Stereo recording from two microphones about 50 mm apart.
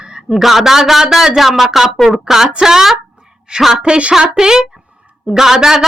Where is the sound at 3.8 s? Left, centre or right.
Right.